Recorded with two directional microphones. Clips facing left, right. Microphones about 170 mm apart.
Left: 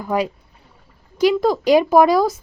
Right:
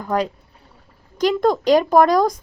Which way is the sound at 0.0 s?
10° left (ahead or behind).